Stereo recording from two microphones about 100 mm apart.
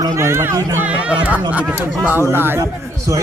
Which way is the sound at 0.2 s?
25° right (ahead or behind).